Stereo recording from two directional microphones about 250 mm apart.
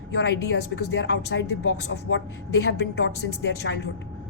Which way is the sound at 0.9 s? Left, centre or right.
Left.